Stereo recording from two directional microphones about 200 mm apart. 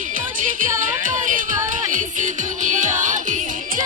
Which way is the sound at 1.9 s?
40° right (ahead or behind).